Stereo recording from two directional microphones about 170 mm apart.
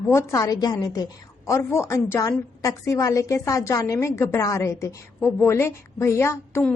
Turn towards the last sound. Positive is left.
turn(degrees=15)  # may be behind; listen again after turning